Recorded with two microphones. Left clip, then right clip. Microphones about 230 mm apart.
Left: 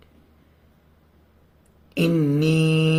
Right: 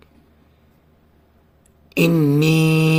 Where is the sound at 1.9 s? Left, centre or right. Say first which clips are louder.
Right 5 dB; right.